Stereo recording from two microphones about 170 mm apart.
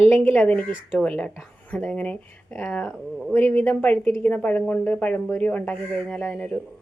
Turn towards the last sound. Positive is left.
turn(degrees=10)  # may be behind; listen again after turning